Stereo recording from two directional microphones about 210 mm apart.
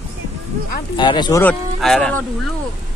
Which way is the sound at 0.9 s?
20° left (ahead or behind).